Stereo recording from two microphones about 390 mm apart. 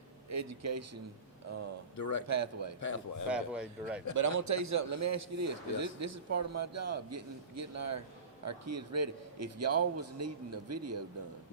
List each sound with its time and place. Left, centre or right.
0.3 s speech: right
2.0 s a man's voice: left
2.2 s speech: right
2.8 s a man's voice: left
3.2 s speech: centre
4.1 s a man's voice: right